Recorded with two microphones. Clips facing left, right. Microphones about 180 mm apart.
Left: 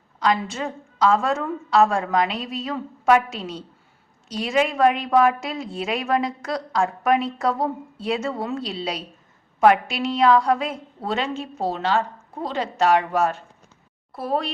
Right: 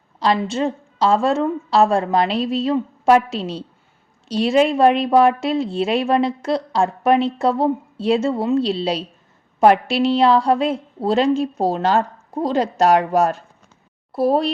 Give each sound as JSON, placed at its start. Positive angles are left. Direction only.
{"t": 0.2, "sound": "a woman's voice", "side_deg": -30}